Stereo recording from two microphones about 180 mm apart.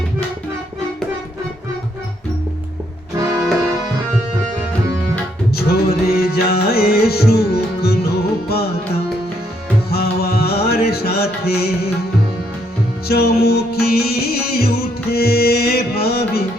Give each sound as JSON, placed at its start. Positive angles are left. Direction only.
{"t": 5.5, "sound": "music", "side_deg": 60}
{"t": 9.9, "sound": "music", "side_deg": 60}
{"t": 13.1, "sound": "music", "side_deg": 60}